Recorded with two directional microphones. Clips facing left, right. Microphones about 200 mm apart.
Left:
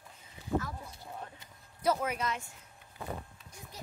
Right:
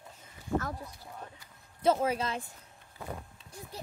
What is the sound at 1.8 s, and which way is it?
Speech, 30° right (ahead or behind).